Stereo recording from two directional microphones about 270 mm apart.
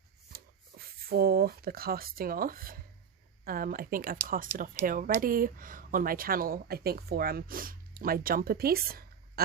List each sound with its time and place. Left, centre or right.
0.3 s speech: right